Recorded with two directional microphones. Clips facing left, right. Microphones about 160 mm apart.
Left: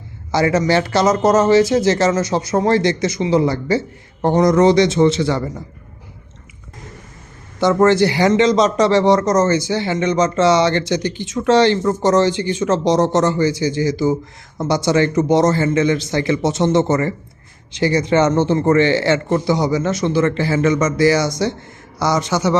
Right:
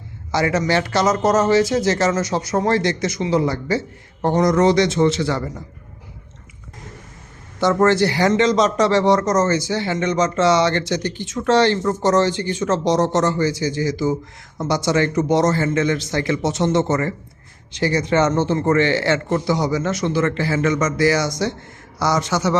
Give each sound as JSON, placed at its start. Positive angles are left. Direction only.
{"t": 0.3, "sound": "a man's voice", "side_deg": 30}
{"t": 7.6, "sound": "speech", "side_deg": 20}